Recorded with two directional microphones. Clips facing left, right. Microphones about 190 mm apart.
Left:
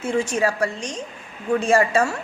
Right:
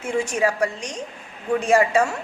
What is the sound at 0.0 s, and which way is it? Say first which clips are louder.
A woman's voice: left 1 dB; 15° right (ahead or behind).